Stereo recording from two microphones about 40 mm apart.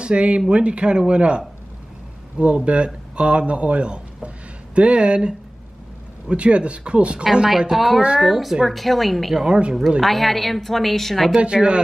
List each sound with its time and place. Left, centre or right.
0.0 s speech: right
7.7 s a woman's voice: centre
9.3 s speech: centre
10.0 s a woman's voice: centre
11.3 s speech: right